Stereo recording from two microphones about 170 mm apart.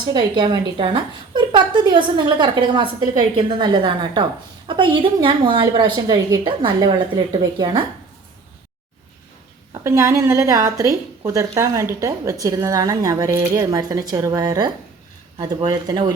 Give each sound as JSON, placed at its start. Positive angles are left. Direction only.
{"t": 0.0, "sound": "a woman's voice", "side_deg": -25}
{"t": 9.8, "sound": "a woman's voice", "side_deg": -15}